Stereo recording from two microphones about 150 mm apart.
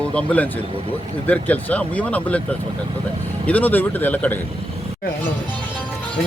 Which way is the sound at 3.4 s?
10° left (ahead or behind).